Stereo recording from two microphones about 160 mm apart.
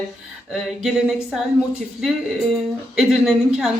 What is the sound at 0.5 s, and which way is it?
Speech, 5° right (ahead or behind).